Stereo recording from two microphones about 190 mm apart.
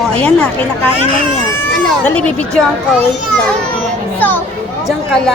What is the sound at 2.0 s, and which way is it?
Speech, 5° left (ahead or behind).